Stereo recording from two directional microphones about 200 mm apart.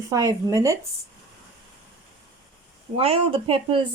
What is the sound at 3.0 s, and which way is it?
Speech, 30° right (ahead or behind).